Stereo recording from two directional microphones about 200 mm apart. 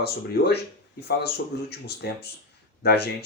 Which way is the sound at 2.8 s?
55° left (ahead or behind).